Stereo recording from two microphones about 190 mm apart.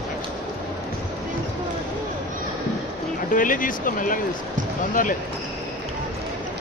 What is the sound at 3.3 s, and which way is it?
Speech, 45° left (ahead or behind).